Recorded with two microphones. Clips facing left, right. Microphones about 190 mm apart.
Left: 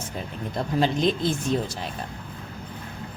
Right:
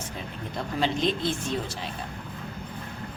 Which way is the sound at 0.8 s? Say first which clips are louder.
Left 3 dB; 45° left (ahead or behind).